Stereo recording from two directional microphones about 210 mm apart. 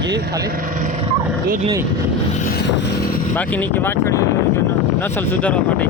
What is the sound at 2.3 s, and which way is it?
Vehicle, 40° left (ahead or behind).